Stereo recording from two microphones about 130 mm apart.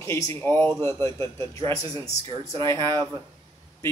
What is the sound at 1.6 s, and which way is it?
A man's voice, 45° right (ahead or behind).